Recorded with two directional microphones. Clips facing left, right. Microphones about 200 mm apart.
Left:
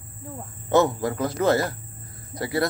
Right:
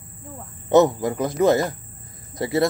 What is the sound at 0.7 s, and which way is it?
Speech, 20° right (ahead or behind).